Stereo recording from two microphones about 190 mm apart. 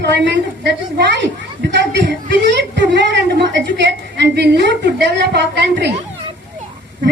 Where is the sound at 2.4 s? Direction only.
65° right (ahead or behind).